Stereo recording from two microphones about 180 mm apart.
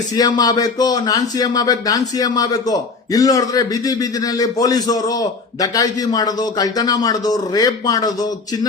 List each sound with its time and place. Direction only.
0.2 s a man's voice: 20° left (ahead or behind)